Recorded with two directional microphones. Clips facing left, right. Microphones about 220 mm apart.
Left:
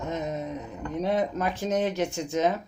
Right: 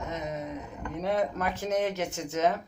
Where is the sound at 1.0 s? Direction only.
20° left (ahead or behind).